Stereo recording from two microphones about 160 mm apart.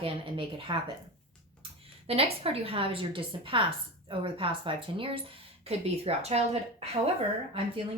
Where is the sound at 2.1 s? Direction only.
40° right (ahead or behind).